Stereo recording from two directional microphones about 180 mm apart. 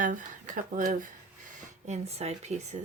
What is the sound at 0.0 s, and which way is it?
Speech, 45° right (ahead or behind).